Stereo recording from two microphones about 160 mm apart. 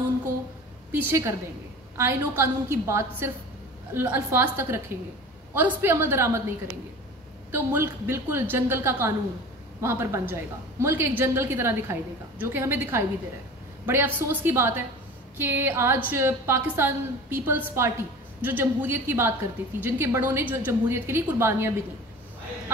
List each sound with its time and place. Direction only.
0.9 s a woman's voice: 15° right (ahead or behind)
7.5 s a woman's voice: 15° right (ahead or behind)